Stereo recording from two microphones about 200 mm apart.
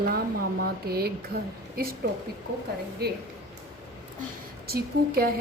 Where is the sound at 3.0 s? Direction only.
55° right (ahead or behind).